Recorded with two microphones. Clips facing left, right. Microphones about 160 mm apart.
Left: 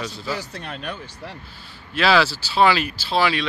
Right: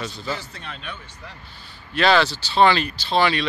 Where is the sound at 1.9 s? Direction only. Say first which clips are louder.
Even; 5° left (ahead or behind).